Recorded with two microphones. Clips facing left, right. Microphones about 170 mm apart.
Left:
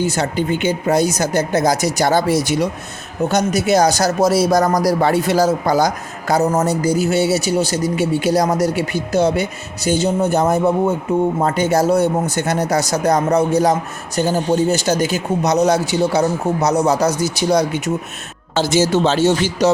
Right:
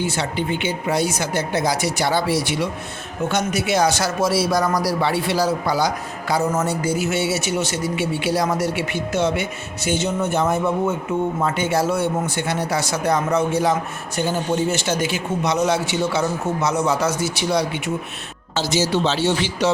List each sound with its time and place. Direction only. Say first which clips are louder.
0.0 s speech: left 4 dB; 40° left (ahead or behind)